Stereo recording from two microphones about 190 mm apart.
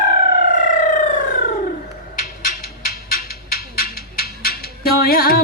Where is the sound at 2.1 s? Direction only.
45° left (ahead or behind).